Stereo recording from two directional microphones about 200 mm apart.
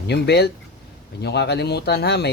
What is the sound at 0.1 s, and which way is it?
Speech, 55° left (ahead or behind).